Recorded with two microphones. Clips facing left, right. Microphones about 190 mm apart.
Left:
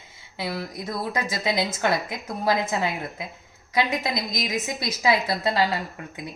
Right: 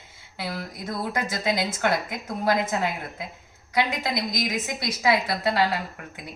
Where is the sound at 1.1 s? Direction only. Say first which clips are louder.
Right 1 dB; 20° left (ahead or behind).